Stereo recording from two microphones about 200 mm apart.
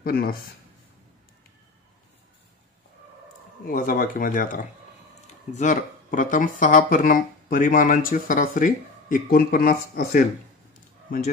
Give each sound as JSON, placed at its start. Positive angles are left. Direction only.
{"t": 0.0, "sound": "speech", "side_deg": 50}
{"t": 3.6, "sound": "speech", "side_deg": 45}
{"t": 10.7, "sound": "a sound", "side_deg": 40}